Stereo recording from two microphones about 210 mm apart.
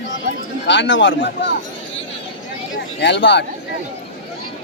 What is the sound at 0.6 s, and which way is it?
Speech, 60° left (ahead or behind).